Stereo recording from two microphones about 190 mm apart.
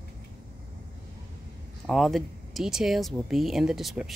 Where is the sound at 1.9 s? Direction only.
Centre (ahead or behind).